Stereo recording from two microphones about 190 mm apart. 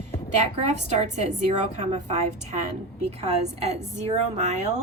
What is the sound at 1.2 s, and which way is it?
A woman's voice, 35° right (ahead or behind).